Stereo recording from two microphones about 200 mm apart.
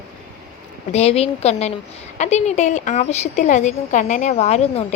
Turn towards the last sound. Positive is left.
turn(degrees=35)  # may be behind; listen again after turning